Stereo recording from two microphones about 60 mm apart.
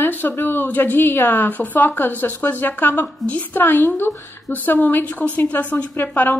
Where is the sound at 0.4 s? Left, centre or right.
Left.